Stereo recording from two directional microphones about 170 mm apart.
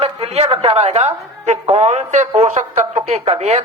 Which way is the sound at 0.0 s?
35° right (ahead or behind).